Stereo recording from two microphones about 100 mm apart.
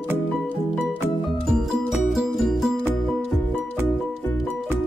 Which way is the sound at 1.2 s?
Centre (ahead or behind).